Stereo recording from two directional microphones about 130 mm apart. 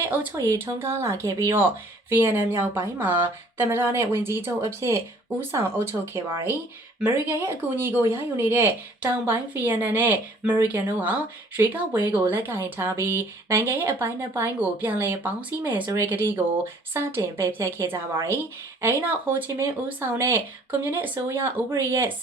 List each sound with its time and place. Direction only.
0.1 s speech: 15° right (ahead or behind)